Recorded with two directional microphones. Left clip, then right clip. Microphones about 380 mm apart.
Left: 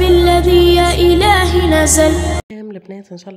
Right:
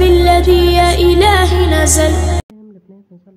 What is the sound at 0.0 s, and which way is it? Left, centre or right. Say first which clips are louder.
Music: right 1 dB; centre.